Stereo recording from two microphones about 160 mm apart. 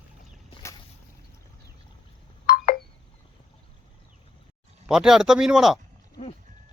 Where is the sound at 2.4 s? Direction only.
65° left (ahead or behind).